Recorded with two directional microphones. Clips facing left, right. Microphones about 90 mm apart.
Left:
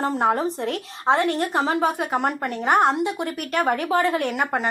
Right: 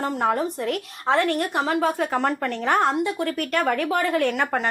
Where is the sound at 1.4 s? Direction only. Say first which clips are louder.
Left 1 dB; 30° left (ahead or behind).